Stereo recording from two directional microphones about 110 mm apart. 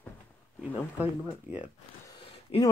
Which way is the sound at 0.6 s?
15° right (ahead or behind).